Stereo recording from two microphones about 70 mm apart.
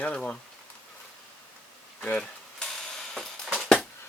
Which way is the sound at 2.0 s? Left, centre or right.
Centre.